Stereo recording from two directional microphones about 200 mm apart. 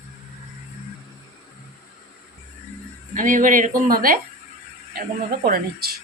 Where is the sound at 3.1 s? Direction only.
40° right (ahead or behind).